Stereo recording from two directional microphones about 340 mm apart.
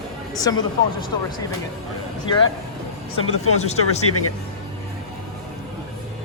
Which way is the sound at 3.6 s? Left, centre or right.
Centre.